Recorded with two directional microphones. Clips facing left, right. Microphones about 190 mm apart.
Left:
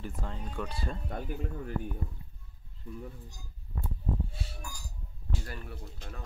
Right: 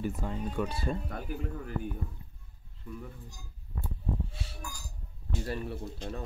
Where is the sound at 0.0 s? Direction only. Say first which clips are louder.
Right 6 dB; 10° right (ahead or behind).